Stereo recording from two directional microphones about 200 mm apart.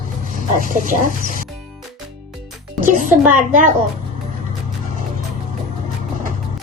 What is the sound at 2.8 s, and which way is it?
Dishes, 40° right (ahead or behind).